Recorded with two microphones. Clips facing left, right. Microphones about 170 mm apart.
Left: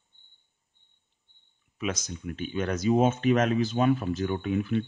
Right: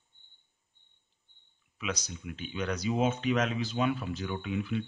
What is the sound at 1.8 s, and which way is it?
Speech, 45° left (ahead or behind).